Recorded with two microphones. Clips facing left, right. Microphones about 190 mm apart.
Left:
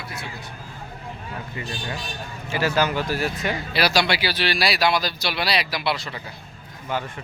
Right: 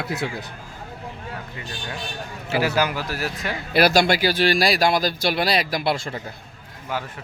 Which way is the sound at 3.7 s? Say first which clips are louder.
Right 6 dB; 50° right (ahead or behind).